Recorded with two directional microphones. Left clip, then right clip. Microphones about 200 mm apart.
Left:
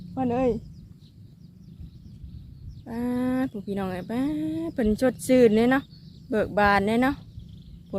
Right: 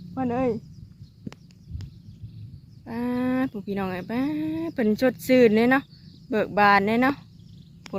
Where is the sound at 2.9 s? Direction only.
20° right (ahead or behind).